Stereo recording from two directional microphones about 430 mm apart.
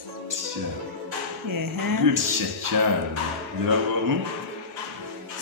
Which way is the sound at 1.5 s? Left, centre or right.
Right.